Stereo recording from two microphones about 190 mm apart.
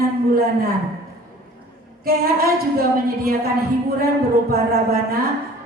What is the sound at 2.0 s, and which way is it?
A woman's voice, 55° right (ahead or behind).